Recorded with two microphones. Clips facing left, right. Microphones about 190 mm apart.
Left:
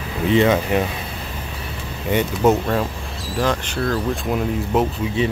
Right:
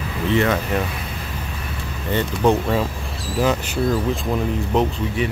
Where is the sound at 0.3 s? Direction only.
20° left (ahead or behind).